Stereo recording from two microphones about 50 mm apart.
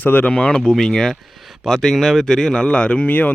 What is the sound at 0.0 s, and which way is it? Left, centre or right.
Speech, left.